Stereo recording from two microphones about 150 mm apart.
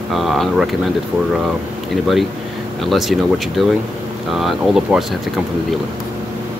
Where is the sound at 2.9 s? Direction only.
Centre (ahead or behind).